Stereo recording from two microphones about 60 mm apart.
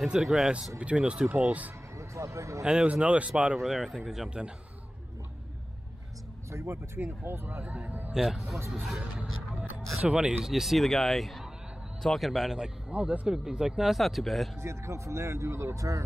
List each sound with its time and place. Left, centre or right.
0.2 s speech: centre
0.7 s speech: right
2.0 s speech: right
2.6 s speech: centre
3.7 s speech: centre
4.4 s speech: centre
6.5 s speech: right
8.1 s speech: centre
10.0 s speech: centre
10.4 s speech: centre
12.9 s speech: right
13.3 s speech: centre
13.9 s speech: centre
14.6 s speech: right